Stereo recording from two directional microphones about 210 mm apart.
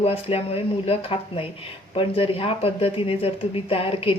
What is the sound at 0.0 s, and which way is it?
Speech, 30° left (ahead or behind).